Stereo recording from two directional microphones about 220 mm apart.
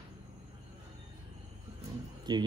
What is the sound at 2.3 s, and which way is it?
Speech, 20° right (ahead or behind).